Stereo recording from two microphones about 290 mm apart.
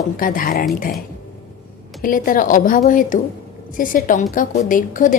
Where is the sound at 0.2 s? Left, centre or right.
Left.